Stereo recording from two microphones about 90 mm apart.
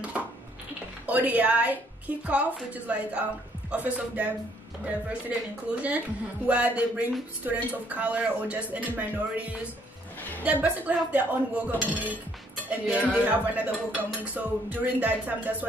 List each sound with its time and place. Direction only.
1.0 s speech: 15° right (ahead or behind)